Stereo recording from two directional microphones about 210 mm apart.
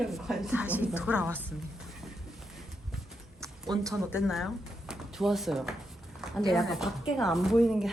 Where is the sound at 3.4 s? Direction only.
15° right (ahead or behind).